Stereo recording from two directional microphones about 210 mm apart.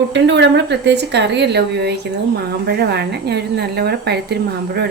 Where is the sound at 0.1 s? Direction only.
55° right (ahead or behind).